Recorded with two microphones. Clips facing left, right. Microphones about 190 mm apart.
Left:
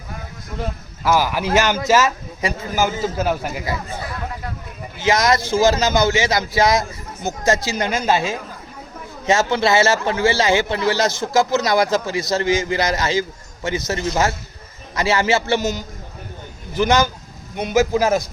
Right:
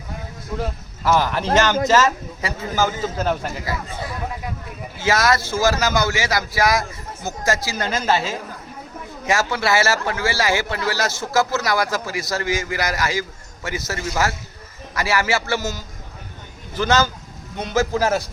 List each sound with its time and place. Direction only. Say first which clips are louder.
0.6 s a man's voice: left 1 dB; 5° left (ahead or behind)
4.9 s a man's voice: left 2 dB; 20° left (ahead or behind)